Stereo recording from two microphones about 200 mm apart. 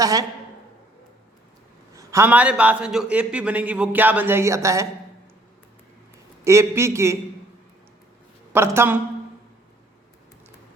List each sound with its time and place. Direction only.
0.0 s a man's voice: 15° right (ahead or behind)
2.0 s a man's voice: 15° right (ahead or behind)
6.4 s a man's voice: 15° right (ahead or behind)
8.5 s a man's voice: 10° right (ahead or behind)